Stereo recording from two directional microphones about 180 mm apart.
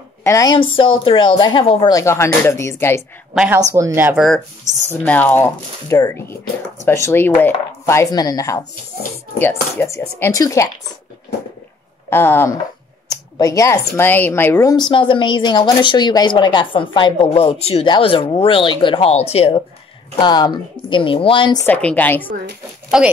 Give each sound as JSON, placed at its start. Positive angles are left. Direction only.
{"t": 0.2, "sound": "a woman's voice", "side_deg": 15}
{"t": 3.3, "sound": "speech", "side_deg": -15}
{"t": 5.0, "sound": "speech", "side_deg": 10}
{"t": 12.1, "sound": "a woman's voice", "side_deg": 10}
{"t": 21.6, "sound": "speech", "side_deg": 10}
{"t": 22.8, "sound": "speech", "side_deg": -5}